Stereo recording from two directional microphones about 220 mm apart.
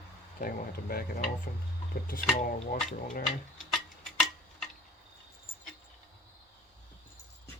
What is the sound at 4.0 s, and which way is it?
Tick-tock, centre (ahead or behind).